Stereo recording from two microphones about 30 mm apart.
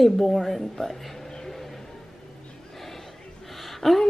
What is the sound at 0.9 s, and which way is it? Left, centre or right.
Speech, centre.